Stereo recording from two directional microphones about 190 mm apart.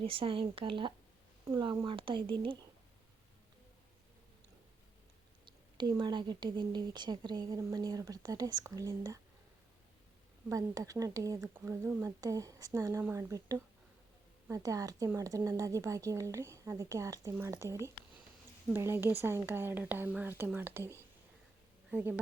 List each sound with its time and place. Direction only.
0.0 s speech: 30° right (ahead or behind)
5.5 s speech: 25° right (ahead or behind)
10.5 s speech: 15° right (ahead or behind)